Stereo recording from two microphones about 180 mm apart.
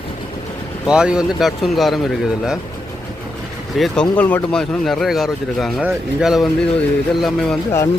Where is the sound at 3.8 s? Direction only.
5° left (ahead or behind).